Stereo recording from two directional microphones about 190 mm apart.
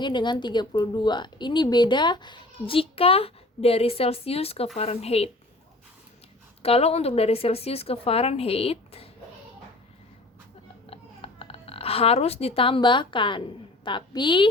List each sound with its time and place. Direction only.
0.0 s a woman's voice: 25° left (ahead or behind)
6.6 s a woman's voice: 30° left (ahead or behind)
10.8 s a sound: 30° left (ahead or behind)
13.8 s a woman's voice: 25° left (ahead or behind)